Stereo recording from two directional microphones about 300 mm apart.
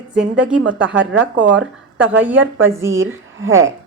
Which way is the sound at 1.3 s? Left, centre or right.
Right.